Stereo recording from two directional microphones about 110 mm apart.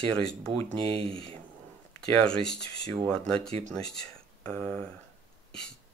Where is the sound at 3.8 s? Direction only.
10° left (ahead or behind).